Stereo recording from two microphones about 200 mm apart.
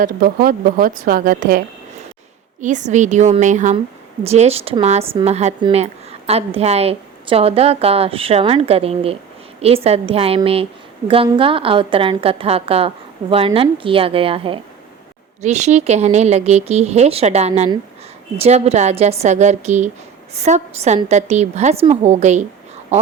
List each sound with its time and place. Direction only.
0.0 s speech: 45° right (ahead or behind)